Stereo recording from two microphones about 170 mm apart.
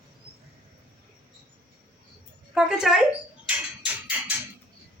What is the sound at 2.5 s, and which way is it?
Speech, 5° right (ahead or behind).